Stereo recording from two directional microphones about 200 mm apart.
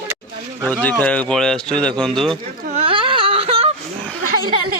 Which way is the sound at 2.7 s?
25° right (ahead or behind).